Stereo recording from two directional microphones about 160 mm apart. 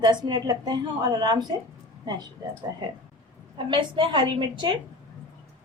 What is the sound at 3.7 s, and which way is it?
A woman's voice, 30° right (ahead or behind).